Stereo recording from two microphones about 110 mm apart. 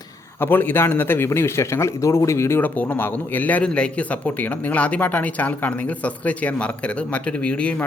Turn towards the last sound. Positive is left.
turn(degrees=10)  # may be behind; listen again after turning